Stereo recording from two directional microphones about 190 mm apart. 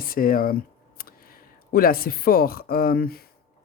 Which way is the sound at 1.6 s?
50° left (ahead or behind).